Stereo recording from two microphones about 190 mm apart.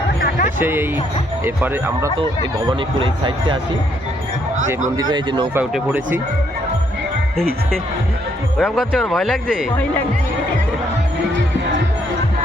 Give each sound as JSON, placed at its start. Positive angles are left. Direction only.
{"t": 0.2, "sound": "music", "side_deg": 50}
{"t": 0.6, "sound": "speech", "side_deg": -10}
{"t": 5.1, "sound": "speech", "side_deg": -25}
{"t": 5.5, "sound": "speech", "side_deg": -10}
{"t": 8.5, "sound": "speech", "side_deg": 0}